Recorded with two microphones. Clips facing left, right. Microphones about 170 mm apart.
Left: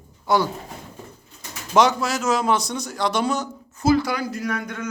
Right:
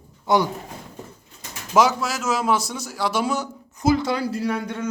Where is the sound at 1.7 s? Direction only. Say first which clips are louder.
Left 1 dB; 5° right (ahead or behind).